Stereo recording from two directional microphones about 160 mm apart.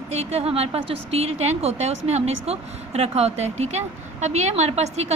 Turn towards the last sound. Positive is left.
turn(degrees=-40)  # may be behind; listen again after turning